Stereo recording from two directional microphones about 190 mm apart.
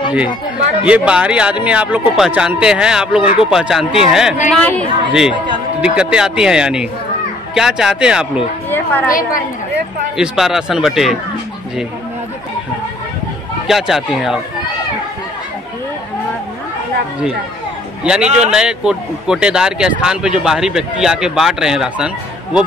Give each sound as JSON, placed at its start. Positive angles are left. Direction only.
{"t": 0.8, "sound": "speech", "side_deg": -5}
{"t": 3.2, "sound": "speech", "side_deg": 30}
{"t": 3.4, "sound": "speech", "side_deg": -5}
{"t": 8.6, "sound": "a sound", "side_deg": 10}
{"t": 10.1, "sound": "speech", "side_deg": 0}
{"t": 13.7, "sound": "speech", "side_deg": 0}
{"t": 18.0, "sound": "speech", "side_deg": -5}